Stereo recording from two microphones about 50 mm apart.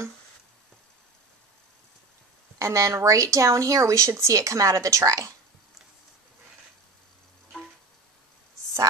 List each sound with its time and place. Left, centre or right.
2.6 s speech: right